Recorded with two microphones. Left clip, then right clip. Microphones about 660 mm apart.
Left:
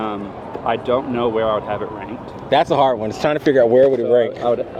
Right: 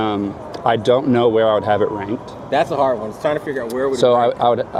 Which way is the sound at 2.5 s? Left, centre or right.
Left.